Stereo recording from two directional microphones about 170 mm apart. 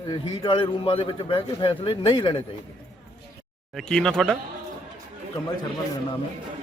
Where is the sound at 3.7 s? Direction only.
5° left (ahead or behind).